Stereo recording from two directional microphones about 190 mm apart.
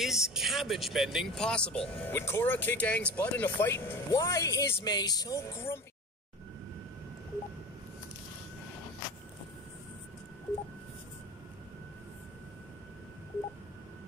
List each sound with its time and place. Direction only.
0.0 s speech: centre (ahead or behind); by 5.8 s 15° left (ahead or behind)